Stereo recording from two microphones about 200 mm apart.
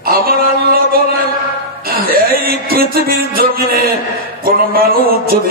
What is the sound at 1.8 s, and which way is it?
Music, 45° right (ahead or behind).